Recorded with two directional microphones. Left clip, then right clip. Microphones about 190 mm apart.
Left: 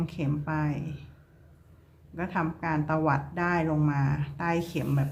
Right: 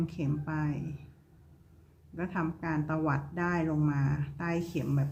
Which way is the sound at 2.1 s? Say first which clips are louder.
Left 4 dB; 5° left (ahead or behind).